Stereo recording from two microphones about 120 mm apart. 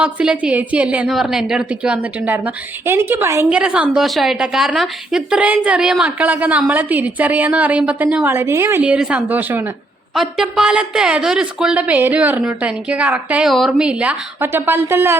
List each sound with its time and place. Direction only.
0.0 s a woman's voice: 10° right (ahead or behind)
3.5 s a woman's voice: 5° right (ahead or behind)
10.2 s a woman's voice: 5° right (ahead or behind)